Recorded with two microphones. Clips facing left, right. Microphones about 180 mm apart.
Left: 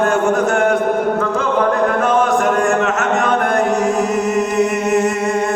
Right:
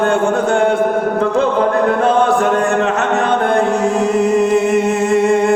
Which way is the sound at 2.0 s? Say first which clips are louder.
Right 1 dB; 30° right (ahead or behind).